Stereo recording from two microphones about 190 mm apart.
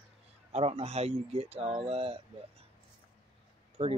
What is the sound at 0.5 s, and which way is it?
Speech, 35° right (ahead or behind).